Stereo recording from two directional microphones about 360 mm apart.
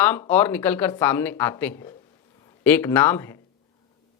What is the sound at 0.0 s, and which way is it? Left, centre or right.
Speech, centre.